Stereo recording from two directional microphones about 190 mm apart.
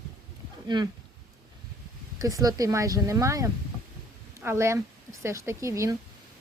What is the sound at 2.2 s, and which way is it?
Speech, 20° right (ahead or behind).